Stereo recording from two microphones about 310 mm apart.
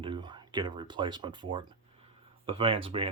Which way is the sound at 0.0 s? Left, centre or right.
Centre.